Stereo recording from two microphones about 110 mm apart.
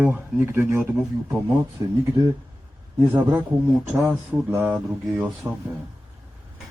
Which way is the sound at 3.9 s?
10° right (ahead or behind).